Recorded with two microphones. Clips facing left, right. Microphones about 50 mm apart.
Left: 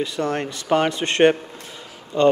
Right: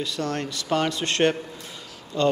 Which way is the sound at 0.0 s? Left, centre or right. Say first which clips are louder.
Left 4 dB; left.